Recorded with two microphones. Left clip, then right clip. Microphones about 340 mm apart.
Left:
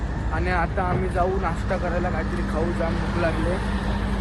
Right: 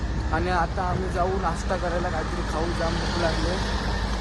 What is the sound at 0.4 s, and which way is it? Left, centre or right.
Speech, centre.